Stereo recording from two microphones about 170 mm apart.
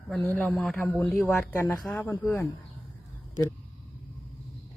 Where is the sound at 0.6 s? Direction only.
10° left (ahead or behind).